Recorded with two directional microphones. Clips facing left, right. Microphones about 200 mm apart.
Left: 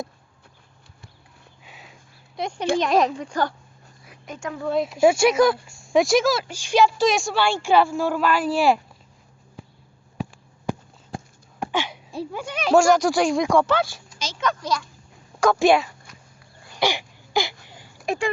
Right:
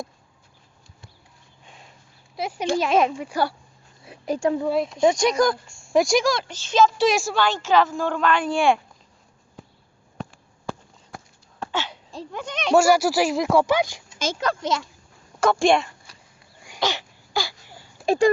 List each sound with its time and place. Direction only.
1.6 s a sound: 5° left (ahead or behind)
2.8 s speech: 5° right (ahead or behind)
4.0 s speech: 30° right (ahead or behind)
4.7 s speech: centre (ahead or behind)
7.0 s speech: centre (ahead or behind)
7.3 s speech: 10° left (ahead or behind)
11.6 s a sound: 15° left (ahead or behind); by 14.0 s 15° right (ahead or behind)
14.4 s speech: 25° right (ahead or behind)
15.4 s speech: centre (ahead or behind)
16.1 s a sound: 35° right (ahead or behind)
16.8 s throat clearing: 15° left (ahead or behind)
18.0 s speech: 30° right (ahead or behind)